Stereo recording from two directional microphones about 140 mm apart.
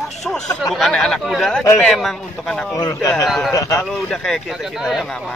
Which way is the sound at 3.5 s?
25° left (ahead or behind).